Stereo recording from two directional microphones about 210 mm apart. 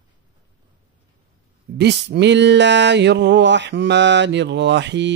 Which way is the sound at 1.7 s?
55° right (ahead or behind).